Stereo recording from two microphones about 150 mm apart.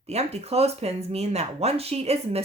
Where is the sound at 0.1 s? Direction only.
45° right (ahead or behind).